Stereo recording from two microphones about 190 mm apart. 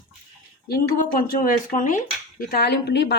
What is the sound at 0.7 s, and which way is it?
A woman's voice, 50° left (ahead or behind).